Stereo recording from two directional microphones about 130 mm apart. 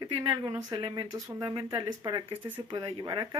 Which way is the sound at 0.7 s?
35° right (ahead or behind).